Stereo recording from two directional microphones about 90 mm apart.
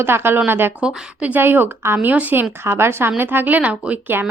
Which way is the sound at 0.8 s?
10° right (ahead or behind).